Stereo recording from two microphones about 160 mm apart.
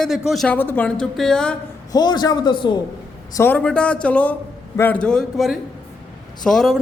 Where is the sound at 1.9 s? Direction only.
25° left (ahead or behind).